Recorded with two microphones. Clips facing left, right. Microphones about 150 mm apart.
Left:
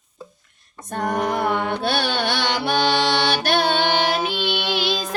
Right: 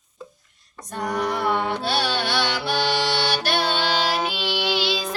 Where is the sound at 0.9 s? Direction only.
50° left (ahead or behind).